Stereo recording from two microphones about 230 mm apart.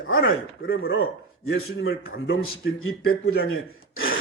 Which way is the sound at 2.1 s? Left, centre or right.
Left.